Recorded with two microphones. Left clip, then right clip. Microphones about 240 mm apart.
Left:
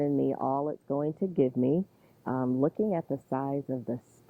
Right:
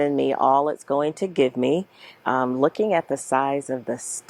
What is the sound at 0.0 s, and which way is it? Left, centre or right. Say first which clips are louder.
Speech: right 8 dB; centre.